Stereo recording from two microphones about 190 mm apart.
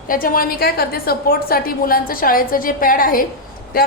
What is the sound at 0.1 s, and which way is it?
A woman's voice, 50° left (ahead or behind).